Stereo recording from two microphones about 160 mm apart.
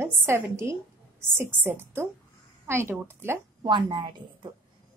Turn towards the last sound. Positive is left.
turn(degrees=-30)  # may be behind; listen again after turning